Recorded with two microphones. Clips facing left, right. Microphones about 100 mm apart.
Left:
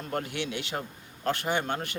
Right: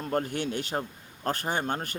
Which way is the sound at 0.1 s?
40° right (ahead or behind).